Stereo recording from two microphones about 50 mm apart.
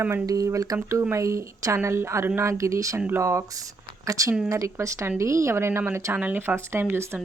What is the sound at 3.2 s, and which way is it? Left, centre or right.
Speech, right.